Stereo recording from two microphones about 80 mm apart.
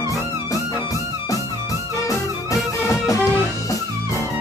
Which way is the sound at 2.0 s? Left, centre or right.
Left.